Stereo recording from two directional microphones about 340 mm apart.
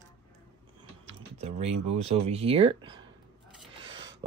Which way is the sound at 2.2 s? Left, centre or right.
Centre.